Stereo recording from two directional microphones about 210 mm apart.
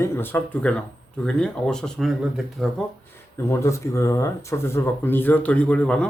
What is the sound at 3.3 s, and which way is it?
Speech, 15° left (ahead or behind).